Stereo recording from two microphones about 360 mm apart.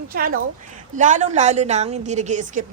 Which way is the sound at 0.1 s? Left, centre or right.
Right.